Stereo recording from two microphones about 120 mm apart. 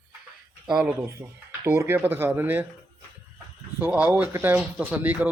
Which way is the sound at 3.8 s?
15° right (ahead or behind).